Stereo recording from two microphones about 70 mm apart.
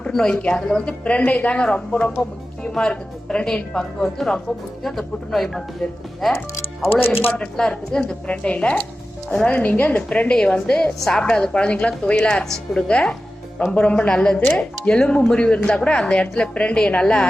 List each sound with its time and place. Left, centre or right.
0.0 s speech: centre
6.3 s speech: left
7.3 s speech: centre